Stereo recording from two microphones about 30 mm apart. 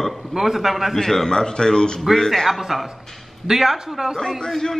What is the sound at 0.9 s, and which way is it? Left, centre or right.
Speech, centre.